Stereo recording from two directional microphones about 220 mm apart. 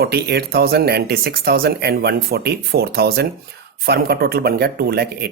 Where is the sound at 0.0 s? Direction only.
45° right (ahead or behind).